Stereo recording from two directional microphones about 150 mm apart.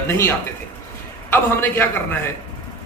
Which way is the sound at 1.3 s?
15° left (ahead or behind).